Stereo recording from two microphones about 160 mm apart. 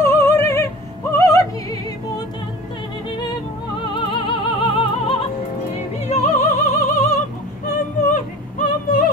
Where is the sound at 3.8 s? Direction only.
30° left (ahead or behind).